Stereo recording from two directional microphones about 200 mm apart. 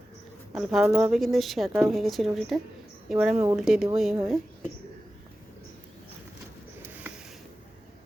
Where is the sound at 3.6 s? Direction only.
5° right (ahead or behind).